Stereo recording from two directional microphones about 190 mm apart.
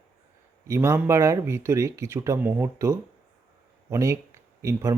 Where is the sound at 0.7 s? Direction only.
15° right (ahead or behind).